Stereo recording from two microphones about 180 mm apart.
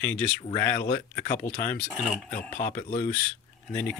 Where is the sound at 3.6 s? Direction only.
10° left (ahead or behind).